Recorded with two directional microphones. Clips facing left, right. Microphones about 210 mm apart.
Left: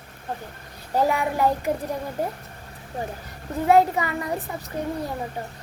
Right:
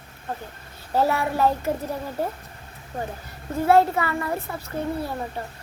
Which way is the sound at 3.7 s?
15° left (ahead or behind).